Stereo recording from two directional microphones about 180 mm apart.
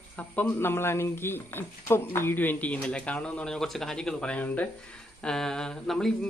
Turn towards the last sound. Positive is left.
turn(degrees=5)  # may be behind; listen again after turning